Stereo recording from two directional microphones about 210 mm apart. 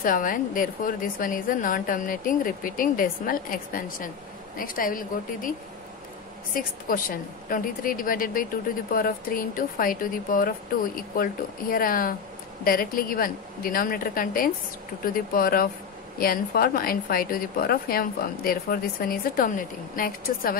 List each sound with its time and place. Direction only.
0.0 s a woman's voice: 40° left (ahead or behind)
6.5 s a woman's voice: 40° left (ahead or behind)